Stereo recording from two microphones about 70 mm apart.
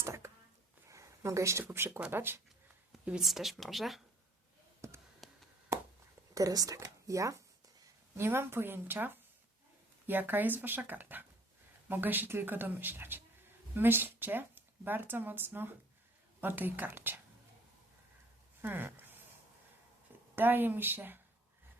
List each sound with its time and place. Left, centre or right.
0.0 s a sound: right
1.7 s speech: right
3.2 s speech: centre
4.8 s a sound: right
5.2 s a sound: centre
6.3 s speech: right
8.1 s a woman's voice: right
18.6 s speech: right
20.3 s a woman's voice: right